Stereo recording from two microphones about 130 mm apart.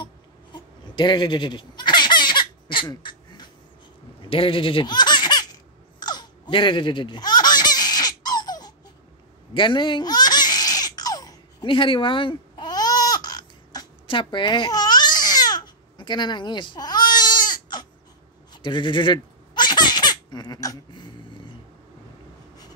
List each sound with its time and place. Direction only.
0.0 s bleat: 35° left (ahead or behind)
4.2 s baby laughter: 45° left (ahead or behind)
14.0 s babbling: 40° left (ahead or behind)
18.5 s baby laughter: 40° left (ahead or behind)